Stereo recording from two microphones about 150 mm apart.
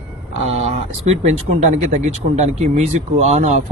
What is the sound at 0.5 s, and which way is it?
Speech, 45° right (ahead or behind).